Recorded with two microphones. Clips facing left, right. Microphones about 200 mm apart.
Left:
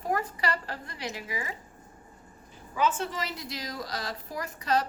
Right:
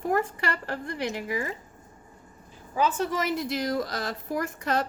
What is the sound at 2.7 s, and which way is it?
A woman's voice, 40° right (ahead or behind).